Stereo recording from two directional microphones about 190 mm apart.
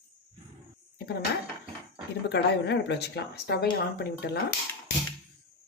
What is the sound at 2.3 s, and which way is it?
Speech, 60° left (ahead or behind).